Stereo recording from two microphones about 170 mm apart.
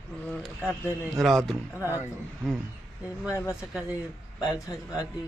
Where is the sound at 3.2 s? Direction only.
15° left (ahead or behind).